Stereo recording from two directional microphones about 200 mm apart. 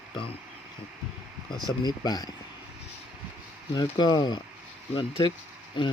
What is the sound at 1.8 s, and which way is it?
Speech, 20° left (ahead or behind).